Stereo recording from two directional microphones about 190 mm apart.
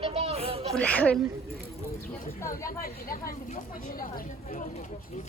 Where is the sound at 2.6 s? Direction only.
50° left (ahead or behind).